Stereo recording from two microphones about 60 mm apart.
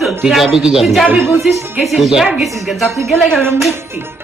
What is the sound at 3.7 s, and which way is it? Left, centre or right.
Music, right.